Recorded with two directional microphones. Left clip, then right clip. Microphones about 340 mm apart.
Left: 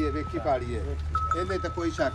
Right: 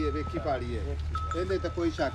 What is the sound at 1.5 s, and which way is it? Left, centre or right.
Speech, left.